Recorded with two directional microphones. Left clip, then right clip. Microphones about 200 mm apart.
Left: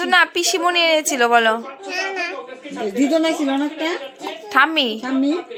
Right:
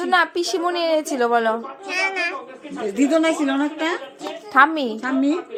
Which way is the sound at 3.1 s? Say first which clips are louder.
Even; 15° left (ahead or behind).